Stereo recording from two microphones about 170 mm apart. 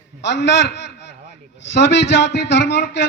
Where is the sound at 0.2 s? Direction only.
90° left.